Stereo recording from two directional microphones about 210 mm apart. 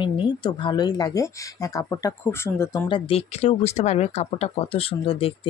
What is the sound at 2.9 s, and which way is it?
Speech, 25° left (ahead or behind).